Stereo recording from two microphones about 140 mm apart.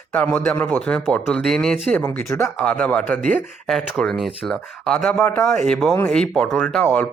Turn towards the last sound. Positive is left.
turn(degrees=10)  # may be behind; listen again after turning